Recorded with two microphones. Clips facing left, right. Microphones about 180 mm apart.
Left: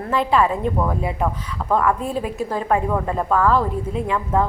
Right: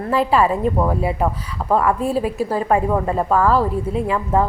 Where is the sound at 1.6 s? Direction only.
20° right (ahead or behind).